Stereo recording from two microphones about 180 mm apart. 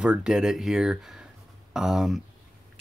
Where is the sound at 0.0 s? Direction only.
5° right (ahead or behind).